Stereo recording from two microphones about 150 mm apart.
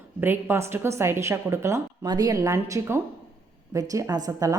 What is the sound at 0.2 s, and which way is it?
A woman's voice, 15° right (ahead or behind).